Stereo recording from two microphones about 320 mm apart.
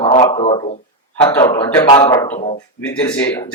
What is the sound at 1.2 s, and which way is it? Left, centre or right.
Speech, centre.